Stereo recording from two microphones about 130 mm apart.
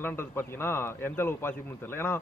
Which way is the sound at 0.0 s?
20° left (ahead or behind).